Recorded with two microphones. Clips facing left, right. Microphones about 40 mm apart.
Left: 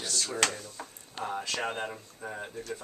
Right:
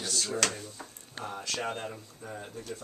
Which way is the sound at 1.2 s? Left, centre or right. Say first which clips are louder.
Left 2 dB; left.